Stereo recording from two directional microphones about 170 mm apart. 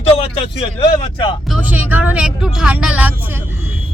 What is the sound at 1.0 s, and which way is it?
Speech, 30° left (ahead or behind).